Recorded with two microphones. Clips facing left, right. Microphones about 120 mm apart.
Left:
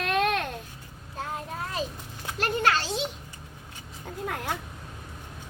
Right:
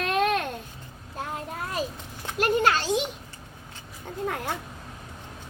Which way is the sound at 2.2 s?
15° right (ahead or behind).